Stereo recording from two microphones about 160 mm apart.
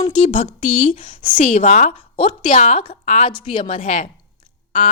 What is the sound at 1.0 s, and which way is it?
Speech, 30° left (ahead or behind).